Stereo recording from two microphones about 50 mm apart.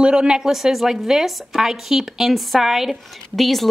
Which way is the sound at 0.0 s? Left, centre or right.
Centre.